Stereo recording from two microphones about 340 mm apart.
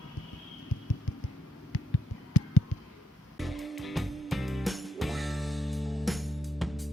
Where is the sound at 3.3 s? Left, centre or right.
Centre.